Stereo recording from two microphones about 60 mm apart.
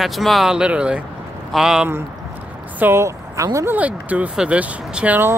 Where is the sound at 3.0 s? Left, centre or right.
Right.